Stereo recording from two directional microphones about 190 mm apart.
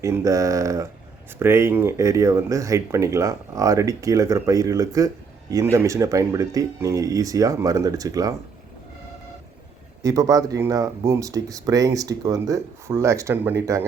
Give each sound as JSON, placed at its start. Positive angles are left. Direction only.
{"t": 0.0, "sound": "speech", "side_deg": -15}
{"t": 10.0, "sound": "speech", "side_deg": -20}